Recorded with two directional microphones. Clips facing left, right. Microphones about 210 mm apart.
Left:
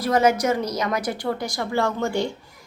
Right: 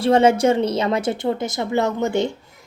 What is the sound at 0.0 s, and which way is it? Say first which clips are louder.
A woman's voice: right 5 dB; 30° right (ahead or behind).